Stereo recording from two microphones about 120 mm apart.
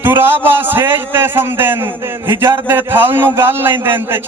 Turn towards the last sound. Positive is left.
turn(degrees=-20)  # may be behind; listen again after turning